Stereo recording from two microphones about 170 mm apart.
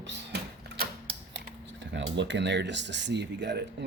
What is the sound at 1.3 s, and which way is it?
Speech, 90° right.